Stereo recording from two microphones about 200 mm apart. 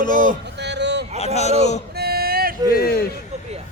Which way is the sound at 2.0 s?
50° right (ahead or behind).